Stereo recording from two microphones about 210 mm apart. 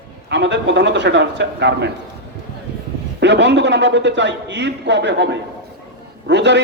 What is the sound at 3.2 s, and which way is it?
A man's voice, 55° right (ahead or behind).